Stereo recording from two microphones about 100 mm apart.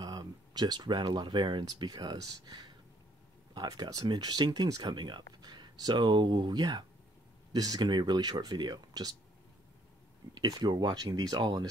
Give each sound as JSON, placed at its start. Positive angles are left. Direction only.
{"t": 0.0, "sound": "speech", "side_deg": -45}
{"t": 3.6, "sound": "speech", "side_deg": -40}
{"t": 10.3, "sound": "speech", "side_deg": -45}